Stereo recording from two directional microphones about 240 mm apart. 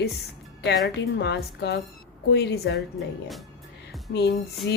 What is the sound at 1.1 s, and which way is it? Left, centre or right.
A woman's voice, left.